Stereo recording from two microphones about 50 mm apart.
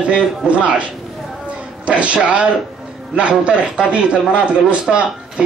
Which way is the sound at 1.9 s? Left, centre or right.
Right.